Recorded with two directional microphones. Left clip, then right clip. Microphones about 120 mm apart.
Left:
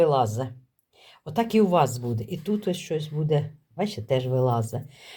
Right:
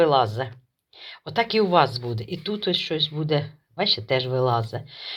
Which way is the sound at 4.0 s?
5° left (ahead or behind).